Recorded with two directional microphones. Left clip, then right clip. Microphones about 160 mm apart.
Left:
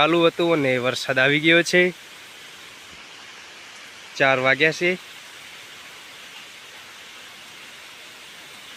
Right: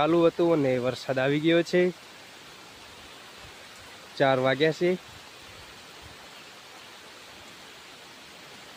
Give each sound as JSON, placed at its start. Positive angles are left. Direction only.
{"t": 0.0, "sound": "speech", "side_deg": 0}
{"t": 4.2, "sound": "speech", "side_deg": -10}